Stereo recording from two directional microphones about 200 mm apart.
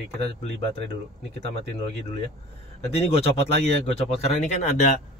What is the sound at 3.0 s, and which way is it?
Speech, 30° left (ahead or behind).